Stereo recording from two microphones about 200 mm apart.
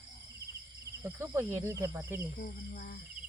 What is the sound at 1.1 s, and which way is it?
Speech, 15° right (ahead or behind).